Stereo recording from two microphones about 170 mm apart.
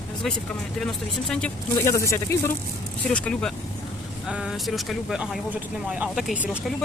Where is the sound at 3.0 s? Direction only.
5° left (ahead or behind).